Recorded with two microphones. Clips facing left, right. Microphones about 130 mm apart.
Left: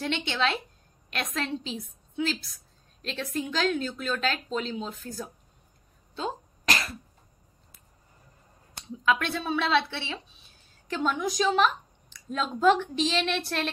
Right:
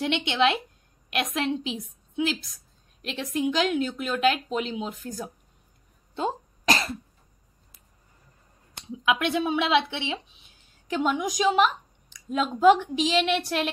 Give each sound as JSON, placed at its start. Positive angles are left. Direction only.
{"t": 0.0, "sound": "speech", "side_deg": -15}
{"t": 8.7, "sound": "speech", "side_deg": -15}